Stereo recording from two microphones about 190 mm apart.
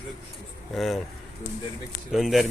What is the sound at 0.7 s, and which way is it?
Speech, centre (ahead or behind).